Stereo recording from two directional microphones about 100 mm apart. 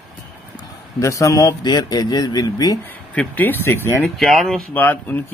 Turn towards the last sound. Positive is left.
turn(degrees=20)  # may be behind; listen again after turning